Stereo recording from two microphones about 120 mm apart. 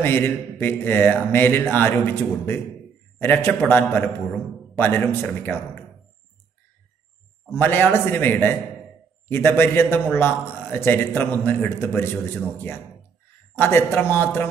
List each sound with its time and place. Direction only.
0.0 s speech: 20° left (ahead or behind)
7.5 s a man's voice: 15° left (ahead or behind)
13.6 s speech: 20° left (ahead or behind)